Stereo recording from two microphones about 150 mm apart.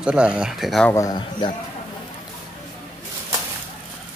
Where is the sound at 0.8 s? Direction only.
20° left (ahead or behind).